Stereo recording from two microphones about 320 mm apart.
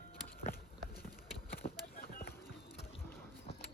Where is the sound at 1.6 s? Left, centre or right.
Left.